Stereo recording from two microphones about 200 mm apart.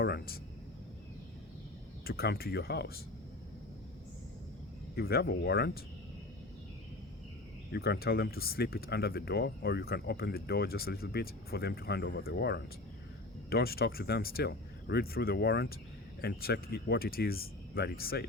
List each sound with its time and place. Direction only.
0.0 s speech: 55° left (ahead or behind)
2.0 s speech: 50° left (ahead or behind)
4.9 s speech: 50° left (ahead or behind)
7.7 s speech: 50° left (ahead or behind)